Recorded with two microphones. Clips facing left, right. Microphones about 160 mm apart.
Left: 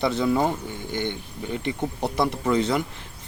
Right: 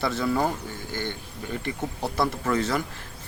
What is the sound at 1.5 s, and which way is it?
Speech, 20° left (ahead or behind).